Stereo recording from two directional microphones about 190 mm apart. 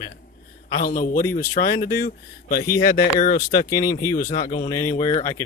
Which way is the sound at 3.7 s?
15° left (ahead or behind).